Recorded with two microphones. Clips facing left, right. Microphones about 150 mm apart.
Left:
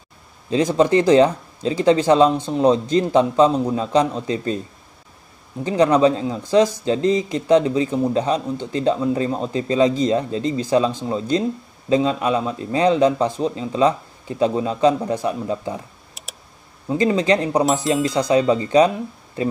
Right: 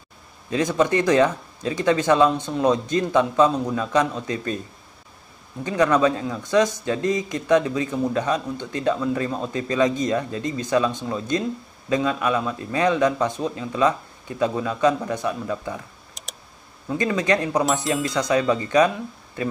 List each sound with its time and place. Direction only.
0.5 s speech: 25° left (ahead or behind)
5.6 s speech: 30° left (ahead or behind)
16.2 s a sound: 5° left (ahead or behind)
16.8 s speech: 25° left (ahead or behind)